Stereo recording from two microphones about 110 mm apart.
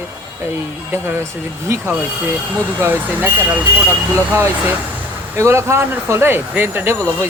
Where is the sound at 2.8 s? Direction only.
15° right (ahead or behind).